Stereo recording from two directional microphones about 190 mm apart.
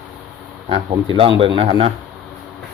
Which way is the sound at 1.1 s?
30° right (ahead or behind).